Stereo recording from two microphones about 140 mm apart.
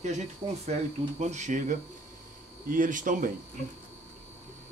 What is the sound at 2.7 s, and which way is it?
Speech, 70° right (ahead or behind).